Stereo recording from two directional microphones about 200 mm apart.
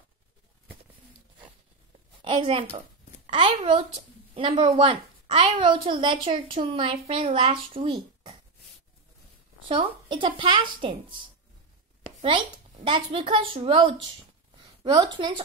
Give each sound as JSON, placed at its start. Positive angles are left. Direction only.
{"t": 2.2, "sound": "a woman's voice", "side_deg": -25}
{"t": 9.7, "sound": "a woman's voice", "side_deg": -25}
{"t": 12.2, "sound": "a woman's voice", "side_deg": -25}